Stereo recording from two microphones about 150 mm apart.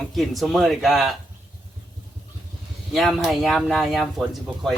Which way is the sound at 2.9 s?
Centre (ahead or behind).